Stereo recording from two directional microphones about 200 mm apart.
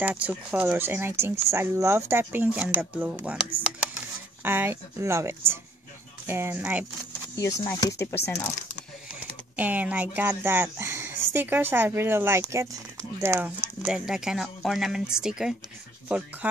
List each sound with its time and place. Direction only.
0.0 s speech: 5° right (ahead or behind)
7.3 s speech: 15° left (ahead or behind)
9.6 s speech: 5° right (ahead or behind)